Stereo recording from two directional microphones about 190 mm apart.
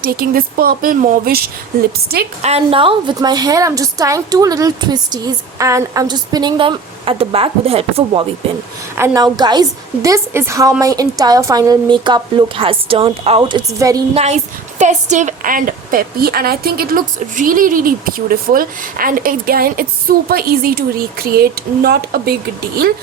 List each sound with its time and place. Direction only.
0.0 s a woman's voice: 50° right (ahead or behind)
2.4 s a woman's voice: 30° right (ahead or behind)
9.0 s a woman's voice: 15° right (ahead or behind)
14.1 s a woman's voice: 35° right (ahead or behind); by 22.4 s 55° right (ahead or behind)